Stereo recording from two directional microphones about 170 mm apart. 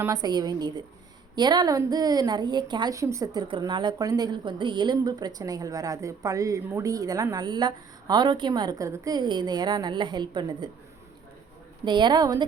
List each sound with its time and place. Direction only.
0.0 s a woman's voice: 20° right (ahead or behind)
11.9 s a woman's voice: 25° right (ahead or behind)